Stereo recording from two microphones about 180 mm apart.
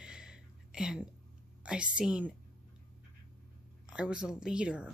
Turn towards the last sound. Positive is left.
turn(degrees=-5)  # may be behind; listen again after turning